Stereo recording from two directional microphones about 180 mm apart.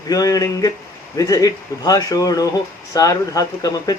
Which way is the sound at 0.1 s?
20° left (ahead or behind).